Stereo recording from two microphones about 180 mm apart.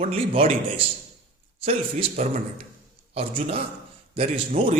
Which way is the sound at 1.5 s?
30° right (ahead or behind).